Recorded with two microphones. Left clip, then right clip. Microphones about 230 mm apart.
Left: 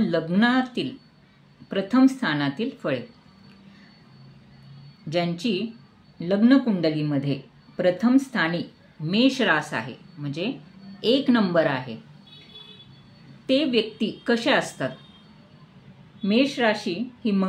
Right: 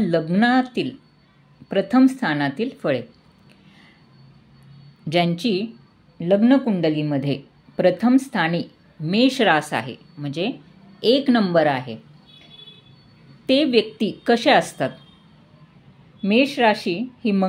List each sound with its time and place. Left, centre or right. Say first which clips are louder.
0.0 s speech: right 3 dB; right
5.1 s speech: right 5 dB; right
13.5 s speech: right 4 dB; right
16.2 s speech: right 4 dB; right